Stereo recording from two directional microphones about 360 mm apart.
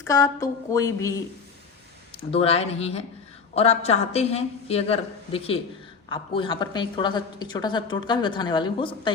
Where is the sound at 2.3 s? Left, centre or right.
Centre.